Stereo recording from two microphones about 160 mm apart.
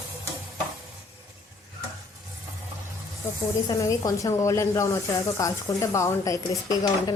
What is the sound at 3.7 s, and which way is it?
Speech, 20° left (ahead or behind).